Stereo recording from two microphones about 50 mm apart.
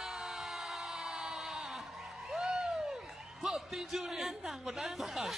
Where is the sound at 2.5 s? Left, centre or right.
Centre.